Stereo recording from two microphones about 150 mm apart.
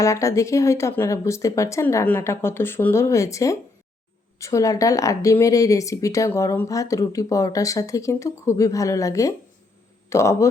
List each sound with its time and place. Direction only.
0.0 s speech: 20° left (ahead or behind)